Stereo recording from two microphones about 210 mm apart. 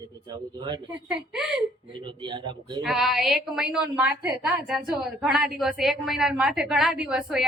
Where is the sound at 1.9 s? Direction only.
25° right (ahead or behind).